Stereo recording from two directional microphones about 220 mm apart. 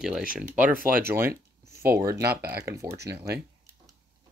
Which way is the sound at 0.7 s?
40° right (ahead or behind).